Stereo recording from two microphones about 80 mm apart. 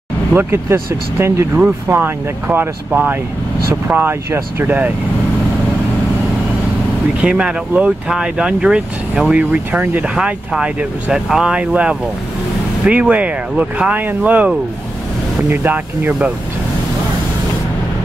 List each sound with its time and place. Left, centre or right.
0.3 s speech: right
7.2 s speech: centre
10.1 s speech: centre
15.5 s speech: right